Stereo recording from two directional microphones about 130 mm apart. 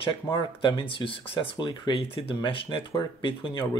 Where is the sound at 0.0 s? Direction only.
40° left (ahead or behind).